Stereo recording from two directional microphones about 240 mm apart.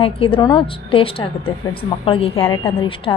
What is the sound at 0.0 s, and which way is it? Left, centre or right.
A woman's voice, left.